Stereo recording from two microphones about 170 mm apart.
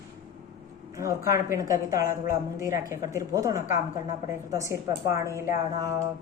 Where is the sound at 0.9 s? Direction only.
15° right (ahead or behind).